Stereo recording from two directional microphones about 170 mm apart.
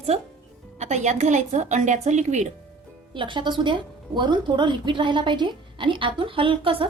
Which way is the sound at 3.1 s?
30° right (ahead or behind).